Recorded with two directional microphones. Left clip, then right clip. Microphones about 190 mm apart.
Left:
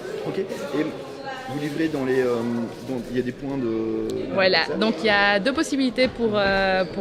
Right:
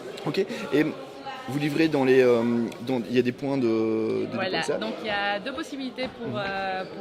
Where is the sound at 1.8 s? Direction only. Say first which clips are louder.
Right 3 dB; 60° right (ahead or behind).